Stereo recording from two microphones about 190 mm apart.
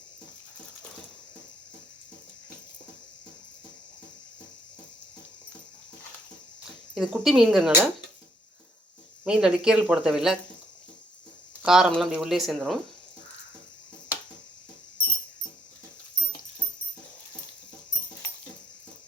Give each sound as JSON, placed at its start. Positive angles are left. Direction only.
{"t": 6.9, "sound": "speech", "side_deg": -5}
{"t": 9.2, "sound": "speech", "side_deg": -5}
{"t": 11.6, "sound": "speech", "side_deg": 0}